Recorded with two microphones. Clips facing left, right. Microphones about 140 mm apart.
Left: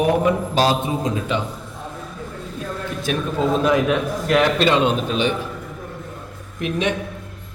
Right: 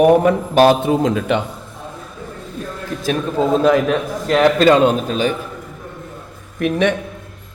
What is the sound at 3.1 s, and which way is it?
Speech, 35° right (ahead or behind).